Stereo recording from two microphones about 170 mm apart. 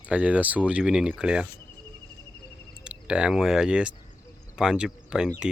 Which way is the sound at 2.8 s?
5° right (ahead or behind).